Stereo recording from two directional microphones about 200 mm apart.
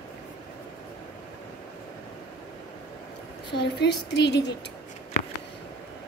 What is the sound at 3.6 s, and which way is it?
Speech, 60° left (ahead or behind).